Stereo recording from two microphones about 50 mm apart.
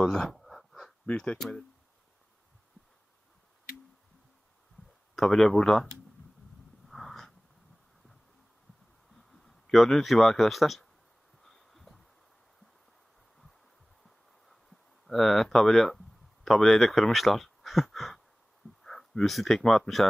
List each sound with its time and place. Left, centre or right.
0.0 s speech: centre
0.4 s a sound: centre
1.0 s speech: left
5.1 s speech: centre
6.9 s snort: centre
9.7 s speech: centre
11.4 s heart sounds: centre
15.0 s speech: centre